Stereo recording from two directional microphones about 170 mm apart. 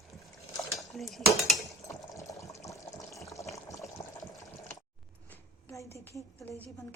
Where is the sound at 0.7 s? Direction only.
Centre (ahead or behind).